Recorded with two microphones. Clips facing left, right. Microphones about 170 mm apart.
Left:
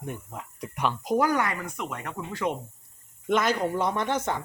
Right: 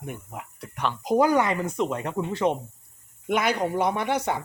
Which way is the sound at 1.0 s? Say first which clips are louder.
Right 5 dB; 20° right (ahead or behind).